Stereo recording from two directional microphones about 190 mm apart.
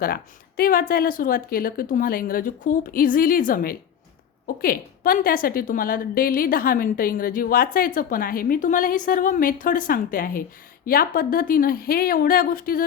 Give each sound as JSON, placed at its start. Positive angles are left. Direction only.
{"t": 0.0, "sound": "a woman's voice", "side_deg": 50}